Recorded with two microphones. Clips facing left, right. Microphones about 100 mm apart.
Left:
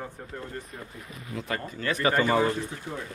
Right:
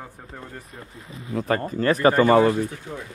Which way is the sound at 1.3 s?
45° right (ahead or behind).